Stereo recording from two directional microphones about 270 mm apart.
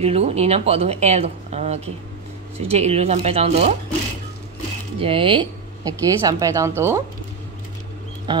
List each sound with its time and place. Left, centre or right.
0.0 s speech: right
4.9 s speech: centre
8.3 s speech: centre